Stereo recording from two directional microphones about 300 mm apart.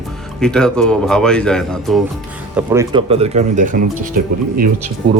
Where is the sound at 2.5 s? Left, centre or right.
Centre; by 4.1 s right.